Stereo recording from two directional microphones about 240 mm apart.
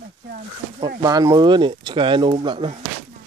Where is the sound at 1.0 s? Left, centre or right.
Centre.